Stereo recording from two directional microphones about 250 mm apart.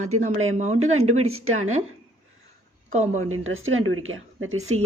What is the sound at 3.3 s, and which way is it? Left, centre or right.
Speech, right.